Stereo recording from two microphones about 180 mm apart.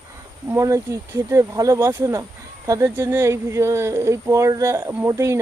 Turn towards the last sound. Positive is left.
turn(degrees=-15)  # may be behind; listen again after turning